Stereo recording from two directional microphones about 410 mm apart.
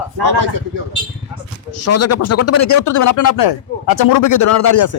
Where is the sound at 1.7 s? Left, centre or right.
Left.